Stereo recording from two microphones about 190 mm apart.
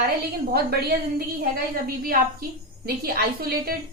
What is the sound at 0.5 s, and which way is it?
Speech, 55° right (ahead or behind).